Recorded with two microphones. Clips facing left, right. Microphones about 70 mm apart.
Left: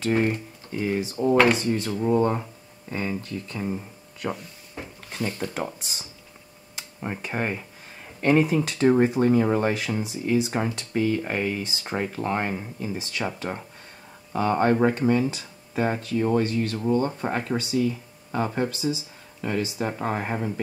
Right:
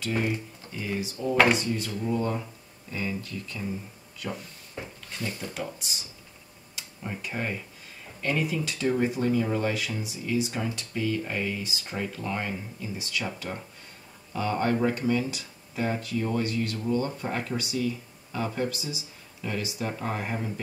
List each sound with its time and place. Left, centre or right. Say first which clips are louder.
0.0 s speech: left 5 dB; left
5.4 s speech: left 5 dB; left